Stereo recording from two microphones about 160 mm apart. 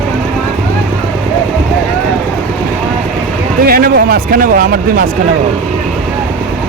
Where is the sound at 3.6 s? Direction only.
65° right (ahead or behind).